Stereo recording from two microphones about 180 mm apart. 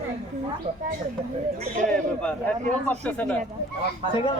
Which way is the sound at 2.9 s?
10° left (ahead or behind).